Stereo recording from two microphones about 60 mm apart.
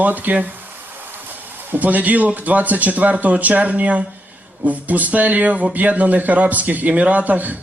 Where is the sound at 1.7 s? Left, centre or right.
Right.